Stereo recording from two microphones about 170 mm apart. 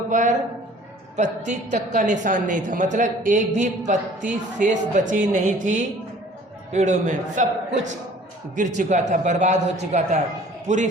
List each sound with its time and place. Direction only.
0.1 s a man's voice: 50° right (ahead or behind)